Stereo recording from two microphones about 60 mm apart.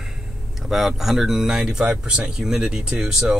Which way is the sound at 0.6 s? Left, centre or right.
Centre.